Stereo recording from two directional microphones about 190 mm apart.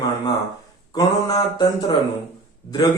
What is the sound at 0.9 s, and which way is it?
A man's voice, 20° left (ahead or behind).